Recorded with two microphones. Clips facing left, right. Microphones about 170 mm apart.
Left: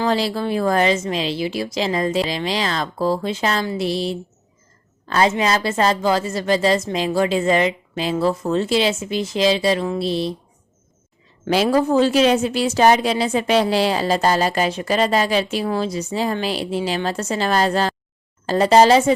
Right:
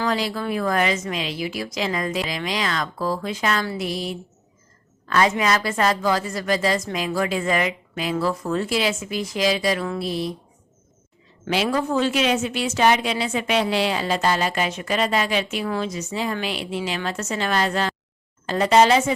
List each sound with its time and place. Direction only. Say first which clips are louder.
0.0 s a woman's voice: left 4 dB; 30° left (ahead or behind)
11.4 s a woman's voice: left 5 dB; 40° left (ahead or behind)